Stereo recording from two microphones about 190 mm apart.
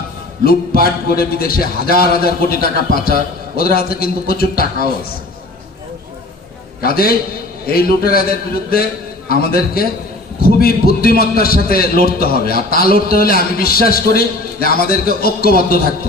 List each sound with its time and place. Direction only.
0.4 s a man's voice: 50° left (ahead or behind)
6.8 s a man's voice: 50° left (ahead or behind)
9.3 s a man's voice: 55° left (ahead or behind)